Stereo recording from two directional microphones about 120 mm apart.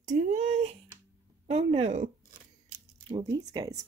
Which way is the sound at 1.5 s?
60° right (ahead or behind).